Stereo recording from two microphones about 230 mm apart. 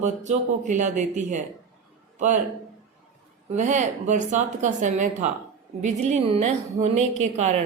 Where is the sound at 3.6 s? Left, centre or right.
Right.